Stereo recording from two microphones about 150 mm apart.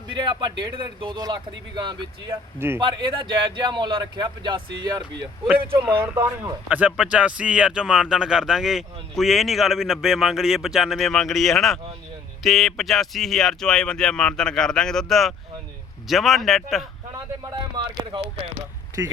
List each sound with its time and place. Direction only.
0.1 s speech: 30° right (ahead or behind)
2.6 s speech: 15° right (ahead or behind)
2.8 s speech: 30° right (ahead or behind)
5.8 s a man's voice: 15° right (ahead or behind); by 16.8 s centre (ahead or behind)
17.4 s speech: 30° right (ahead or behind)